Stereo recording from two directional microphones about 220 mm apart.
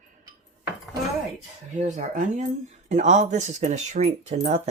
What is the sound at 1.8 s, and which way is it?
Speech, 35° right (ahead or behind).